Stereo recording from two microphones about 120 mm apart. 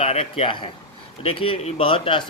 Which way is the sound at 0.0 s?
55° left (ahead or behind).